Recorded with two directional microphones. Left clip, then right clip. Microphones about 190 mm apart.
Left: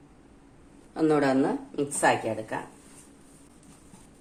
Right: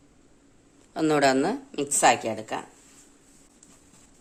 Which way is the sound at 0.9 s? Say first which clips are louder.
Right 2 dB; 45° right (ahead or behind).